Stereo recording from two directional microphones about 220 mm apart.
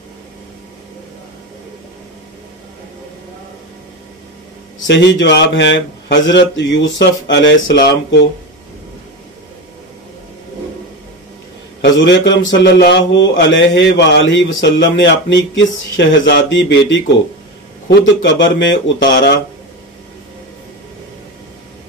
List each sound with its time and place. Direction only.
4.8 s speech: 55° left (ahead or behind)
11.8 s speech: 55° left (ahead or behind)